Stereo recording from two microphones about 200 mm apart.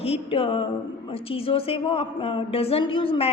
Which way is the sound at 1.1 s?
30° left (ahead or behind).